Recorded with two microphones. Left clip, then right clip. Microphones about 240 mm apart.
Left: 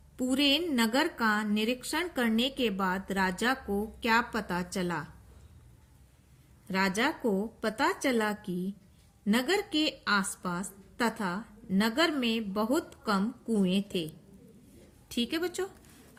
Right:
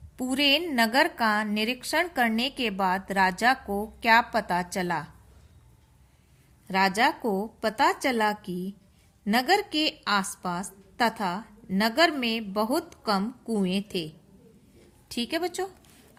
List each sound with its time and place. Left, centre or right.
0.2 s a woman's voice: right
6.7 s a woman's voice: right
15.1 s speech: right